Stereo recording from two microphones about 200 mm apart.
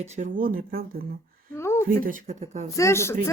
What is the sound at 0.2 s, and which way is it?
Speech, 45° right (ahead or behind).